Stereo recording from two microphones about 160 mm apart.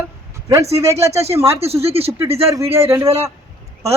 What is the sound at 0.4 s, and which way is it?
Speech, 20° right (ahead or behind).